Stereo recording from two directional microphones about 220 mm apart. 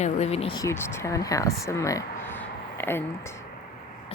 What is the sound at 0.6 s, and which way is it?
A woman's voice, 10° left (ahead or behind).